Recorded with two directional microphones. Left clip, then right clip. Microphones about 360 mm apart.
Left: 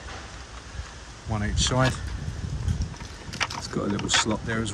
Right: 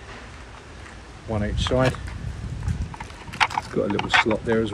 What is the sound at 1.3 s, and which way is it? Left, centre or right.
Speech, centre.